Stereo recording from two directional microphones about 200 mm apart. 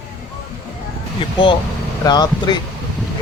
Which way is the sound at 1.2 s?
25° left (ahead or behind).